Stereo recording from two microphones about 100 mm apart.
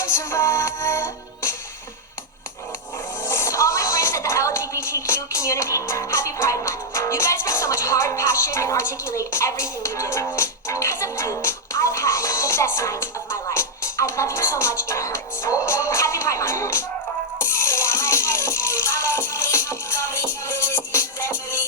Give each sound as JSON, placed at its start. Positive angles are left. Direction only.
{"t": 0.0, "sound": "music", "side_deg": 25}
{"t": 3.2, "sound": "speech", "side_deg": 25}
{"t": 17.4, "sound": "music", "side_deg": 30}